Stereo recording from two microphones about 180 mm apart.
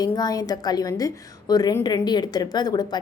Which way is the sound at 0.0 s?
20° left (ahead or behind).